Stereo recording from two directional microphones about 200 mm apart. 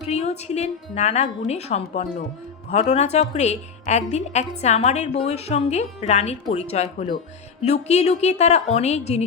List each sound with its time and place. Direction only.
0.0 s a woman's voice: 35° left (ahead or behind)